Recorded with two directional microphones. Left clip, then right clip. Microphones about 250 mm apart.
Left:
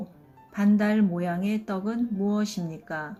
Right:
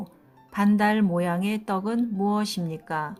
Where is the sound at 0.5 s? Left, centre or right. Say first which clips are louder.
Right 3 dB; right.